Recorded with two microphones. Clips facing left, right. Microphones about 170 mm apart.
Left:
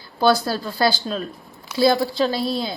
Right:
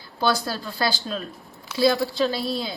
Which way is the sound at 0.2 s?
35° left (ahead or behind).